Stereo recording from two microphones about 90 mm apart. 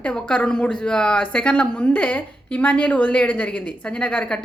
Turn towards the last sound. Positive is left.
turn(degrees=10)  # may be behind; listen again after turning